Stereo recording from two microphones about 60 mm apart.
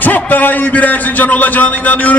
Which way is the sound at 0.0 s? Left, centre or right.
Left.